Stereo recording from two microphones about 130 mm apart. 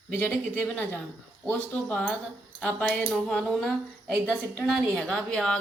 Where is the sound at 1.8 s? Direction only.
10° left (ahead or behind).